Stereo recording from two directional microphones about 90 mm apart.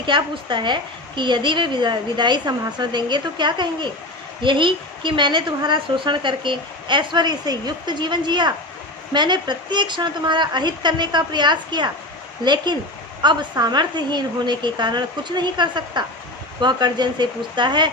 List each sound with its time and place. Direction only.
0.0 s a woman's voice: 60° right (ahead or behind)